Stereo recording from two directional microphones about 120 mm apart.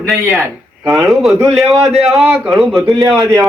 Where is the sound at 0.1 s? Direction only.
Centre (ahead or behind).